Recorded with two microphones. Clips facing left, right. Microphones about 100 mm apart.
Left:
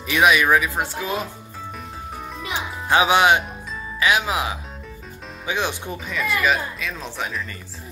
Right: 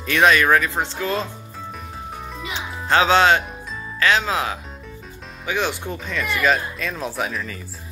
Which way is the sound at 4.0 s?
15° left (ahead or behind).